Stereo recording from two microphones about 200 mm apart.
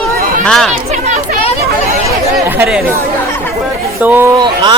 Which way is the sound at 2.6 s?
5° right (ahead or behind).